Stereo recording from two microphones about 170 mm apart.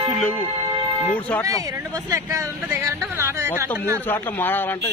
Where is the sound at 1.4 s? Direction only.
20° right (ahead or behind).